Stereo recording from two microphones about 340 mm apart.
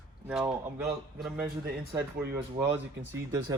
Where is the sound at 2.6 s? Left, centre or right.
Centre.